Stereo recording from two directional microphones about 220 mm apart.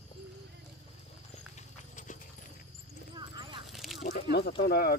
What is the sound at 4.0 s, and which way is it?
Squish, 50° left (ahead or behind).